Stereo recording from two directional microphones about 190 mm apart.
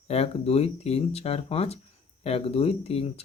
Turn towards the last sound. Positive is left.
turn(degrees=30)  # may be behind; listen again after turning